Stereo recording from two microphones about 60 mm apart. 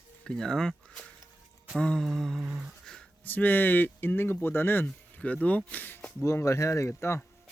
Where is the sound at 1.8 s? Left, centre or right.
Centre.